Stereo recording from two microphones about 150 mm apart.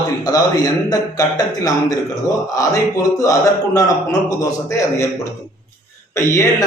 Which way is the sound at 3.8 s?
20° left (ahead or behind).